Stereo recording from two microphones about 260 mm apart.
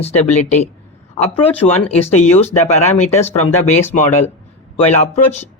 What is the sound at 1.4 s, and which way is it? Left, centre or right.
Speech, left.